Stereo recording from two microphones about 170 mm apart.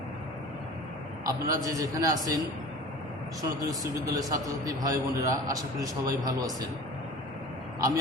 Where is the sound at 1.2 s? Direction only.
20° right (ahead or behind).